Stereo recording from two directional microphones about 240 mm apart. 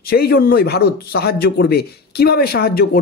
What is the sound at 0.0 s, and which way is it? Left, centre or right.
Speech, left.